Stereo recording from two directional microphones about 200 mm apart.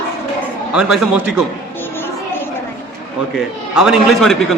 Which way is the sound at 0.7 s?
5° right (ahead or behind).